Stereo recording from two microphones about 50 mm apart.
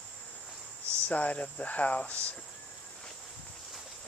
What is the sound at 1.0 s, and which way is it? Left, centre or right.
Speech, left.